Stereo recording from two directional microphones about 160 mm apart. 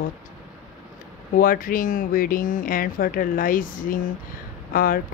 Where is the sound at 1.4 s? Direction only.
60° left (ahead or behind).